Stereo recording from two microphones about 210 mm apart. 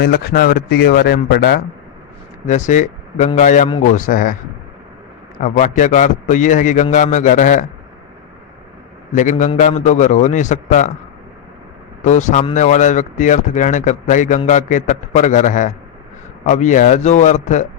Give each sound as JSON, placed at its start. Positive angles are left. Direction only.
{"t": 0.0, "sound": "speech", "side_deg": 45}
{"t": 2.5, "sound": "speech", "side_deg": 35}
{"t": 5.4, "sound": "speech", "side_deg": 40}
{"t": 9.1, "sound": "speech", "side_deg": 35}
{"t": 12.0, "sound": "speech", "side_deg": 35}